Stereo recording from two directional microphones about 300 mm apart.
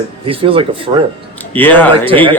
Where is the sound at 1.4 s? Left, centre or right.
Centre.